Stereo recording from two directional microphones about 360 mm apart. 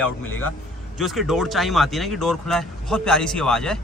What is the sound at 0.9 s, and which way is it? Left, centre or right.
Speech, centre.